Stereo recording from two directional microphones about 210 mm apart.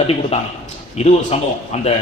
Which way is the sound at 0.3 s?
30° left (ahead or behind).